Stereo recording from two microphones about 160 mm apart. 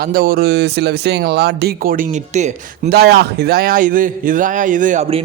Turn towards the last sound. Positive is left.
turn(degrees=-55)  # may be behind; listen again after turning